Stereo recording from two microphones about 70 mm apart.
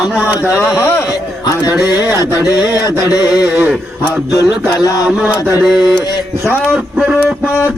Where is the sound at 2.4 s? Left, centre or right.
Left.